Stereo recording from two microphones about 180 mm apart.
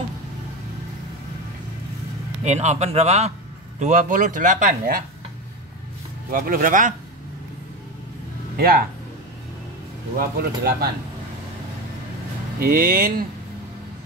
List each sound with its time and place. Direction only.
2.4 s a man's voice: 40° right (ahead or behind)
6.3 s speech: 50° right (ahead or behind)
8.5 s speech: 55° right (ahead or behind)
10.1 s speech: 60° right (ahead or behind)
12.5 s speech: 55° right (ahead or behind)